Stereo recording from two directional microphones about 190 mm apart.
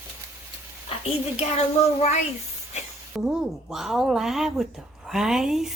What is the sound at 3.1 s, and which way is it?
A woman's voice, 5° right (ahead or behind).